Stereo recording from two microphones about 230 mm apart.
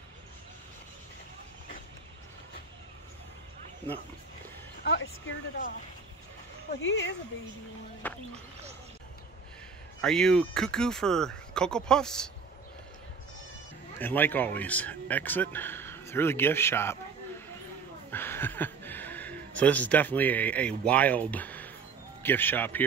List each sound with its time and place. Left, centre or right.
4.8 s speech: left
6.8 s speech: left
8.0 s speech: centre
10.0 s speech: centre
13.9 s speech: centre
18.1 s a sound: centre
22.2 s speech: centre